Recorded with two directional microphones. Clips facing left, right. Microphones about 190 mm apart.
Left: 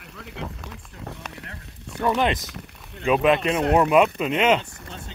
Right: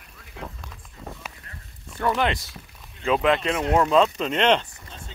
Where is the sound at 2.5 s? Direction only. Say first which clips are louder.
Left 5 dB; 65° left (ahead or behind).